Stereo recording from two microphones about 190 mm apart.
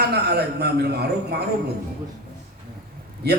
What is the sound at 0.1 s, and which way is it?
A man's voice, 60° right (ahead or behind).